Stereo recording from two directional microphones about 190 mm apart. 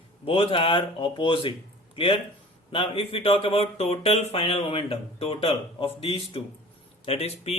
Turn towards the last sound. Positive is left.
turn(degrees=30)  # may be behind; listen again after turning